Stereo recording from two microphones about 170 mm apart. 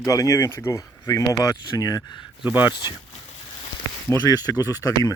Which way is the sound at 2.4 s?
10° right (ahead or behind).